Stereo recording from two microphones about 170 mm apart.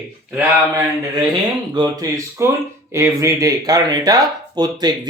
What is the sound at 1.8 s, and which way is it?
Speech, 20° right (ahead or behind).